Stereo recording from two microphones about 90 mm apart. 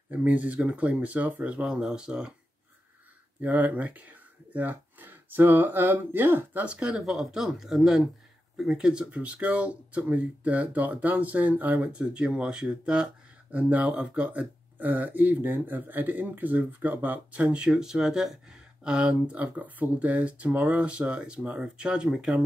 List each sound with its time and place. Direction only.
0.1 s speech: 15° right (ahead or behind)
3.3 s speech: 20° right (ahead or behind)